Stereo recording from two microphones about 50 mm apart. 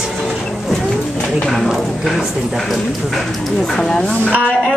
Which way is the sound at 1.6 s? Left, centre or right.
Centre.